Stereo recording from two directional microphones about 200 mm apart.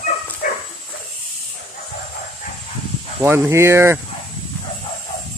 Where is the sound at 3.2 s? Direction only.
10° right (ahead or behind).